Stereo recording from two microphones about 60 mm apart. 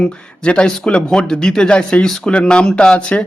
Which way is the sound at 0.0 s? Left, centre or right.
Centre.